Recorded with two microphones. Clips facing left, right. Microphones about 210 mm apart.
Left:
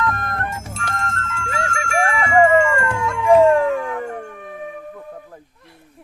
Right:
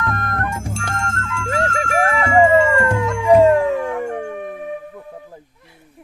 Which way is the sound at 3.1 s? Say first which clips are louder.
Even; 15° right (ahead or behind).